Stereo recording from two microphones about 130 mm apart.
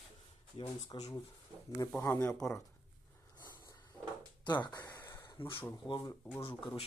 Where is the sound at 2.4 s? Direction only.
5° left (ahead or behind).